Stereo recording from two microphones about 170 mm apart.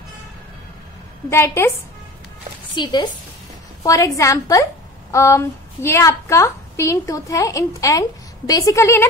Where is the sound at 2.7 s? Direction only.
25° left (ahead or behind).